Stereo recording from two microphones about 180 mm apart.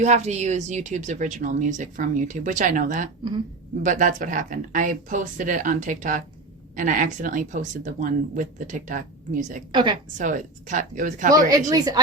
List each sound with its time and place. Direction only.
0.0 s speech: 40° right (ahead or behind)
9.7 s a woman's voice: 25° right (ahead or behind)
10.2 s speech: 45° right (ahead or behind)
11.3 s a woman's voice: 20° right (ahead or behind)